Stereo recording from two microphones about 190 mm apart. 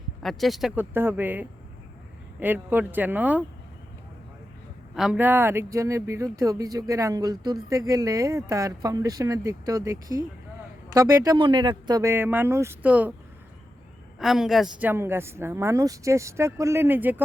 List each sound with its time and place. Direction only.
0.2 s speech: centre (ahead or behind)
4.9 s speech: 5° right (ahead or behind)
14.2 s speech: centre (ahead or behind)